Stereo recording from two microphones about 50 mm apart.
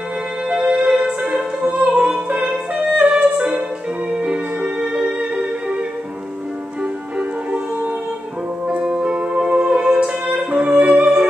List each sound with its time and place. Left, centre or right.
0.5 s music: right
6.8 s music: right